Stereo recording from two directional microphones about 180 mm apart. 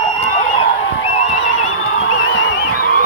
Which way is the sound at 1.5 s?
90° left.